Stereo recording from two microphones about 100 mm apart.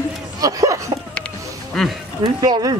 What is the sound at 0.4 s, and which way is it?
Speech, 35° right (ahead or behind).